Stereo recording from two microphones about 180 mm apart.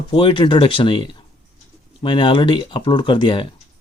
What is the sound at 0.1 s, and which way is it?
Speech, 30° left (ahead or behind).